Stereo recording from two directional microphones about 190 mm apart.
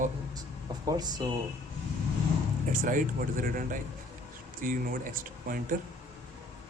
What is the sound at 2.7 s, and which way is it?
Speech, 45° right (ahead or behind).